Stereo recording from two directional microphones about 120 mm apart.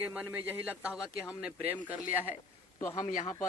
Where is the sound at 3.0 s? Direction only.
90° left.